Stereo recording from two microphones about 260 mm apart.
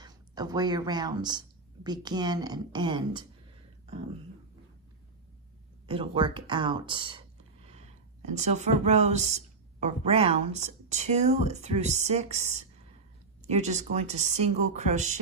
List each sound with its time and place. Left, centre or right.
0.0 s speech: centre
5.8 s speech: centre
8.3 s speech: right